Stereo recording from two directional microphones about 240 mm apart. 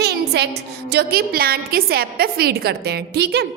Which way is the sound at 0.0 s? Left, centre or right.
Right.